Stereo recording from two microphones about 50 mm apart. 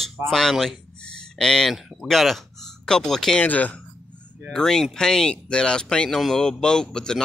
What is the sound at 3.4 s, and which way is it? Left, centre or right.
Speech, left.